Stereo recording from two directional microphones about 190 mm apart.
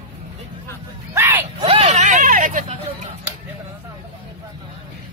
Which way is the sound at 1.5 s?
30° right (ahead or behind).